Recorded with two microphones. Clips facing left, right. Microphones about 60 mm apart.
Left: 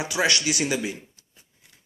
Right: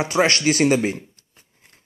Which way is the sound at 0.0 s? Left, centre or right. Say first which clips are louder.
Right 6 dB; right.